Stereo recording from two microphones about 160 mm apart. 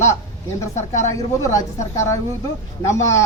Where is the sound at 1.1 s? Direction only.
20° left (ahead or behind).